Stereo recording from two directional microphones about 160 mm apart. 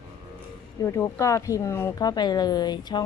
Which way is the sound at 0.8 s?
20° left (ahead or behind).